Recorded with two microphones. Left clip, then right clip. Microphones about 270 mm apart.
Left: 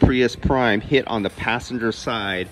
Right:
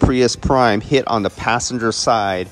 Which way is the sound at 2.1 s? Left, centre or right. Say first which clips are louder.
Right 11 dB; centre.